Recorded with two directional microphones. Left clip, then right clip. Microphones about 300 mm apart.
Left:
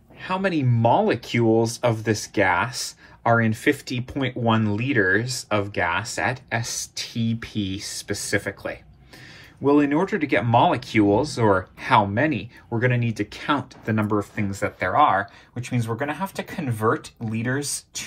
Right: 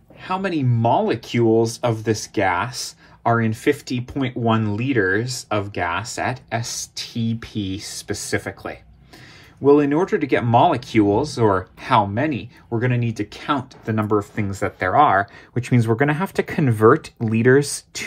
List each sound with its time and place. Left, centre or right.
0.2 s speech: centre